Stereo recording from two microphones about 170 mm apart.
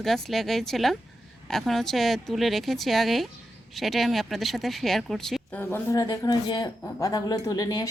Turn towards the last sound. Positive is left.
turn(degrees=20)  # may be behind; listen again after turning